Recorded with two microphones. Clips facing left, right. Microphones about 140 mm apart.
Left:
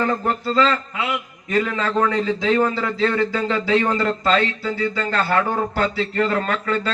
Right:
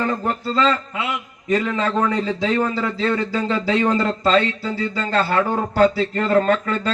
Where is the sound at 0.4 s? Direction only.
30° right (ahead or behind).